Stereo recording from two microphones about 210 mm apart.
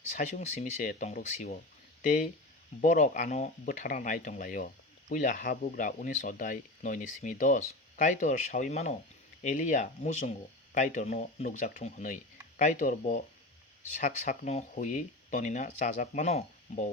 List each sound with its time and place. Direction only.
0.1 s speech: 35° left (ahead or behind)